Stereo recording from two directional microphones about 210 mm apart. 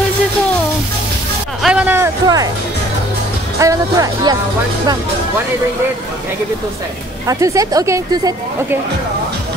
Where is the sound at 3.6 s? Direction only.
15° right (ahead or behind).